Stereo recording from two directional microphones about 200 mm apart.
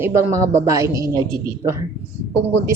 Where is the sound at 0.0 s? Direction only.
15° right (ahead or behind).